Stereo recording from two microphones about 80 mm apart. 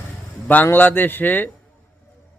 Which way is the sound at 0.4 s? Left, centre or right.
Left.